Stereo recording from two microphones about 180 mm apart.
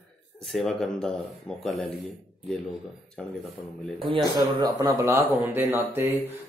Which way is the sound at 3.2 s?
5° left (ahead or behind).